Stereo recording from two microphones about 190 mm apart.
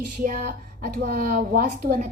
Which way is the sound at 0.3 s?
50° right (ahead or behind).